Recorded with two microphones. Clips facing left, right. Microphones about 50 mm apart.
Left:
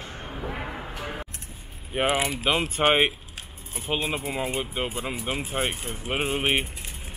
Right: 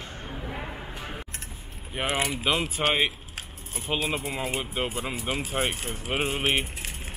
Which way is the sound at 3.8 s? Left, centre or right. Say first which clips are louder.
Left 1 dB; centre.